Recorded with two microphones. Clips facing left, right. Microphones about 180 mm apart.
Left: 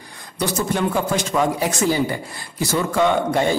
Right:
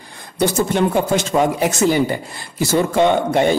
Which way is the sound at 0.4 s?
25° right (ahead or behind).